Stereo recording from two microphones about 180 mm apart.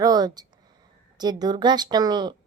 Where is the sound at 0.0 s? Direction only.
20° right (ahead or behind).